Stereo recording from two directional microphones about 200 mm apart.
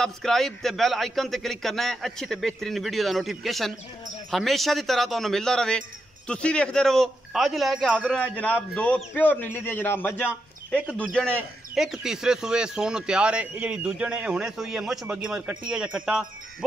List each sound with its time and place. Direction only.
0.0 s a man's voice: centre (ahead or behind)